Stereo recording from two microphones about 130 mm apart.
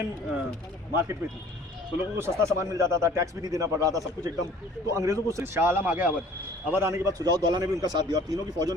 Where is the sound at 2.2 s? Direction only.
20° right (ahead or behind).